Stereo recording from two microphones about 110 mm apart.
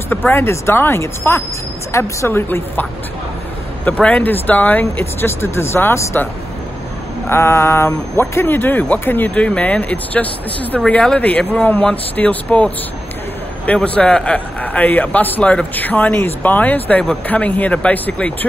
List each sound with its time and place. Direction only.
0.1 s speech: 20° left (ahead or behind)
4.0 s speech: 15° left (ahead or behind)
7.2 s speech: 20° left (ahead or behind)